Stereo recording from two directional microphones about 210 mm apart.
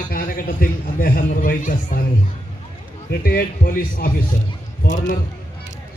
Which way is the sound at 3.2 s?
45° left (ahead or behind).